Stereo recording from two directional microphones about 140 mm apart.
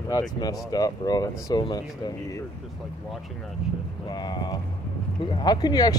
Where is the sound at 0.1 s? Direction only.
30° left (ahead or behind).